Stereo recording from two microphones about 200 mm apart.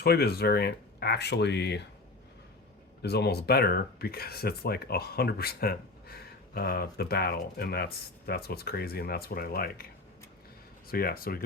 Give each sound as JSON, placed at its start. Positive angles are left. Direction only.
{"t": 0.0, "sound": "speech", "side_deg": 50}
{"t": 3.0, "sound": "speech", "side_deg": 55}
{"t": 10.8, "sound": "speech", "side_deg": 50}